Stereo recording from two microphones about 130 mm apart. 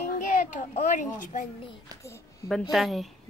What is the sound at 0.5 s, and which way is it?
Speech, 65° left (ahead or behind).